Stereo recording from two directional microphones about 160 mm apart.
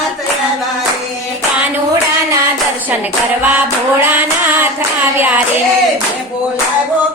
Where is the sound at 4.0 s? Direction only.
10° right (ahead or behind).